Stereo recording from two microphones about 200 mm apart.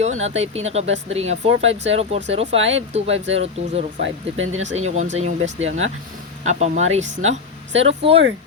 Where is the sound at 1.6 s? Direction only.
70° right (ahead or behind).